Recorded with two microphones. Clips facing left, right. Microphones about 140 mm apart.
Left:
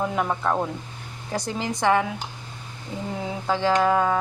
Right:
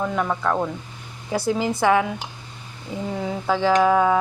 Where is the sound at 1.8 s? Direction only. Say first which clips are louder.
Right 1 dB; 5° right (ahead or behind).